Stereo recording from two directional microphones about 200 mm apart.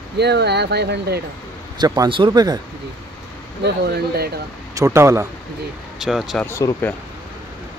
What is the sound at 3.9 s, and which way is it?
Speech, 50° right (ahead or behind).